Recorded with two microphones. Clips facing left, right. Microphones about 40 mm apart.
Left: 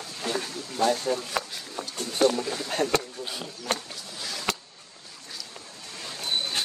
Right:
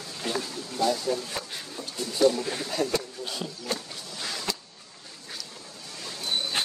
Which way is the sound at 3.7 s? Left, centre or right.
Left.